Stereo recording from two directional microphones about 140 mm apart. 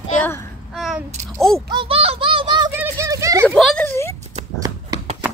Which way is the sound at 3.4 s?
5° left (ahead or behind).